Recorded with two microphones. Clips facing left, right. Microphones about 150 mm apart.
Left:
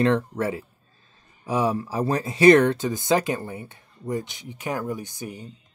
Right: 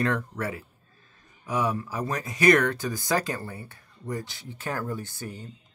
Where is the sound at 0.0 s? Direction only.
25° left (ahead or behind).